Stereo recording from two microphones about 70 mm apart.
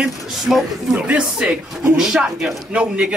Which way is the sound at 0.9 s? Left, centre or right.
Centre.